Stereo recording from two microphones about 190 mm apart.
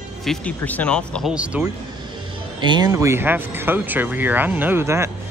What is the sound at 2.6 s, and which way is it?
Speech, 20° right (ahead or behind).